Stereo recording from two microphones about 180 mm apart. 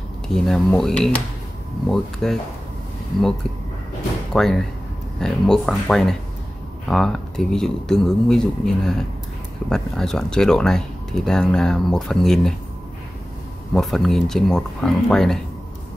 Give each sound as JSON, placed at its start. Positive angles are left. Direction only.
{"t": 0.3, "sound": "speech", "side_deg": 0}
{"t": 4.3, "sound": "speech", "side_deg": 5}
{"t": 13.7, "sound": "speech", "side_deg": 0}